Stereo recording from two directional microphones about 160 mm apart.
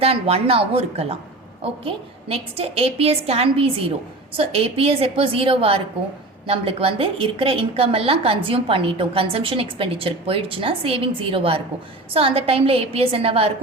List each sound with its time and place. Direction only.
0.0 s a woman's voice: 40° right (ahead or behind)